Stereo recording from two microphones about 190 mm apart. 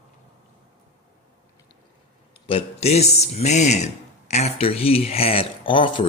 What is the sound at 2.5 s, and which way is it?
A man's voice, 30° left (ahead or behind).